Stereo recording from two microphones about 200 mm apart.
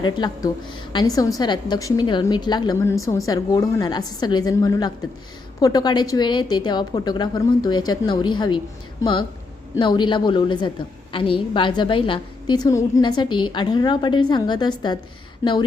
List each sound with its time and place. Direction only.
0.0 s a woman's voice: 20° left (ahead or behind)
9.7 s a woman's voice: 20° left (ahead or behind)